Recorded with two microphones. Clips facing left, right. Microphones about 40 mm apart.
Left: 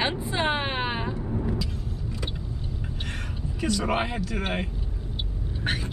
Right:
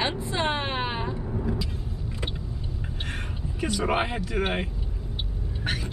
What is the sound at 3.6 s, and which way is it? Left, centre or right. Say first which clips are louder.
Speech: even; centre.